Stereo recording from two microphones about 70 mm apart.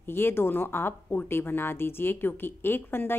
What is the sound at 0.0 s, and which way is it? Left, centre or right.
Speech, left.